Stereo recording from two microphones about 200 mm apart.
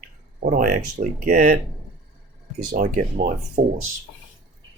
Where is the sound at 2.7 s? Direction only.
40° right (ahead or behind).